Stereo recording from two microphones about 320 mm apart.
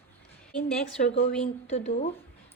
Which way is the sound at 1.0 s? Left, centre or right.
Left.